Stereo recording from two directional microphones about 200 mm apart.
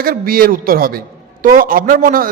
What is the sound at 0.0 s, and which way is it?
A man's voice, 45° right (ahead or behind).